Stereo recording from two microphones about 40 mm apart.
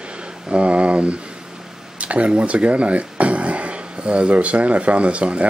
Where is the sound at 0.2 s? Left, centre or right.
Right.